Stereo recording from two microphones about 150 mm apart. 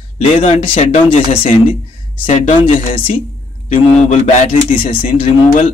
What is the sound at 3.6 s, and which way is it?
A man's voice, 55° left (ahead or behind).